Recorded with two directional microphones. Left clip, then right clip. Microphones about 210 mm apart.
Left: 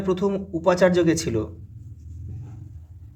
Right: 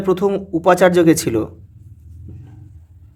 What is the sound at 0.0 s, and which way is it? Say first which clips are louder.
Speech: right 7 dB; 40° right (ahead or behind).